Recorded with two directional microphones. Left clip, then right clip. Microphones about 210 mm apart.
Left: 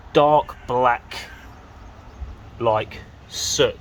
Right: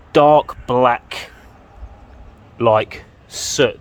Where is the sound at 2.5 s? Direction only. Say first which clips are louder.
Right 6 dB; 45° right (ahead or behind).